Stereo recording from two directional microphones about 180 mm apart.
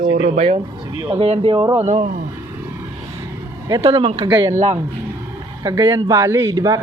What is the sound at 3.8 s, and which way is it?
Speech, 30° right (ahead or behind).